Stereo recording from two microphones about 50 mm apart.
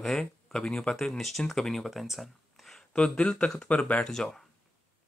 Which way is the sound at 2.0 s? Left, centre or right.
Centre.